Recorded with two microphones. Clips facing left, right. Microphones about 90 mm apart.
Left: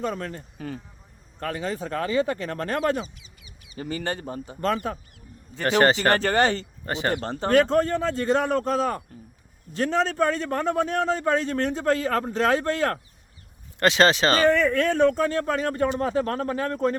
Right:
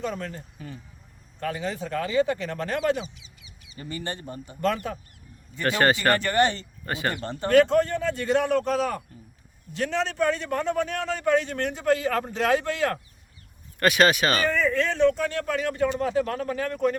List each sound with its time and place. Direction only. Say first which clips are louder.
0.0 s a man's voice: left 2 dB; 45° left (ahead or behind)
5.6 s speech: left 2 dB; 25° left (ahead or behind)
6.9 s speech: left 3 dB; 25° left (ahead or behind)
7.3 s a man's voice: right 2 dB; 35° left (ahead or behind)
13.7 s speech: left 1 dB; 25° left (ahead or behind)
14.5 s a man's voice: left 3 dB; 60° left (ahead or behind); by 16.9 s 35° left (ahead or behind)